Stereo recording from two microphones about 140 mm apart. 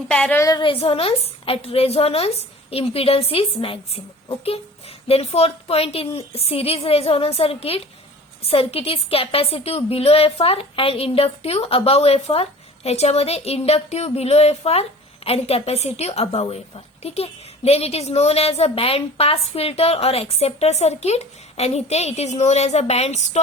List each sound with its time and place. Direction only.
0.1 s a woman's voice: 10° left (ahead or behind)
0.4 s a woman's voice: 30° left (ahead or behind); by 23.4 s 50° left (ahead or behind)